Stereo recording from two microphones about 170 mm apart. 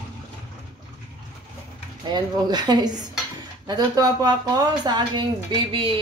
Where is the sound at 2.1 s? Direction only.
25° right (ahead or behind).